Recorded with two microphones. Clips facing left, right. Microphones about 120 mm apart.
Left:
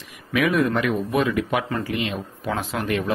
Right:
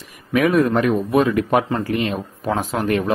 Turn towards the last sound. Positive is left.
turn(degrees=-45)  # may be behind; listen again after turning